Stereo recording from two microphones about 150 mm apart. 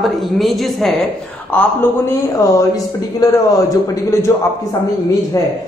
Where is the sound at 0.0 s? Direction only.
Centre (ahead or behind).